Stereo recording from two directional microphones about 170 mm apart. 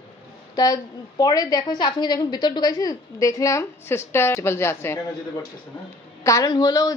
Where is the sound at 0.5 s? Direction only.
20° left (ahead or behind).